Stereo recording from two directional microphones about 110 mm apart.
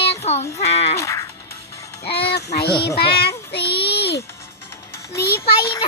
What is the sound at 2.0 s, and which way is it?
Child singing, 60° left (ahead or behind).